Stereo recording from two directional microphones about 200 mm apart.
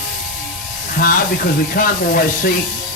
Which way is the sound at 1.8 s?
45° left (ahead or behind).